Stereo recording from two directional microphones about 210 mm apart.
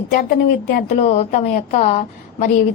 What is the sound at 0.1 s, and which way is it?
A woman's voice, 40° left (ahead or behind).